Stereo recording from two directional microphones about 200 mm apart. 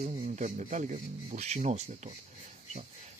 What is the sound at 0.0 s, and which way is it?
Speech, 40° right (ahead or behind).